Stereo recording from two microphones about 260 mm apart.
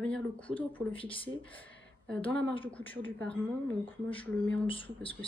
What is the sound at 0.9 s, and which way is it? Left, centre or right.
Speech, centre.